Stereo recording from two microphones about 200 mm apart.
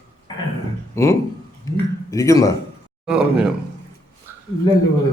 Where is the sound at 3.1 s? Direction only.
5° right (ahead or behind).